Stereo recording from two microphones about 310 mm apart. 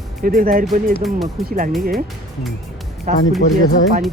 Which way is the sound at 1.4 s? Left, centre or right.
Right.